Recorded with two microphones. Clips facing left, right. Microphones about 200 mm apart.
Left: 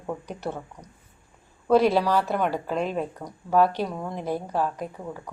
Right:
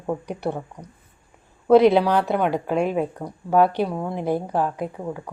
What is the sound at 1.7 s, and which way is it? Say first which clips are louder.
Speech: right 5 dB; 65° right (ahead or behind).